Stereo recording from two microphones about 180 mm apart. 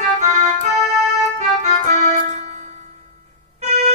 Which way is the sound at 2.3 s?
40° right (ahead or behind).